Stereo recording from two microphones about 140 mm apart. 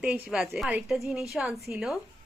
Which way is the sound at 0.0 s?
5° right (ahead or behind).